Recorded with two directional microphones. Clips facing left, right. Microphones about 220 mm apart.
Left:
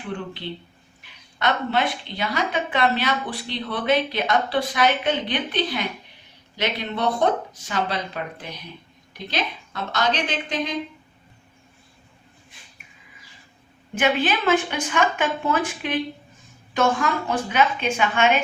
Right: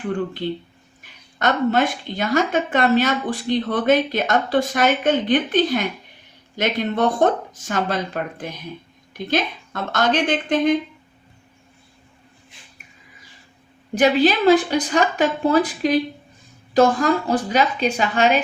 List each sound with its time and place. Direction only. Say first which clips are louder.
1.0 s a woman's voice: right 3 dB; 45° right (ahead or behind)
13.9 s a woman's voice: right 6 dB; 35° right (ahead or behind)